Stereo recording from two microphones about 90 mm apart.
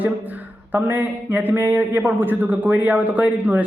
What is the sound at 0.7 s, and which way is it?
A man's voice, 20° right (ahead or behind).